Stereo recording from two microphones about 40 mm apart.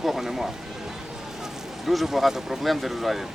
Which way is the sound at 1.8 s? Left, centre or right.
Centre.